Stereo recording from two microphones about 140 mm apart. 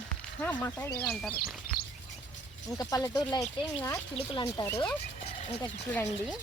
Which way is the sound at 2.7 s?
25° left (ahead or behind).